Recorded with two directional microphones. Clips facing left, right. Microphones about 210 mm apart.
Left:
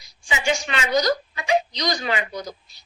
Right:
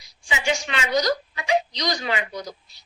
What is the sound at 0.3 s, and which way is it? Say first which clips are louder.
A woman's voice: left 1 dB; 45° left (ahead or behind).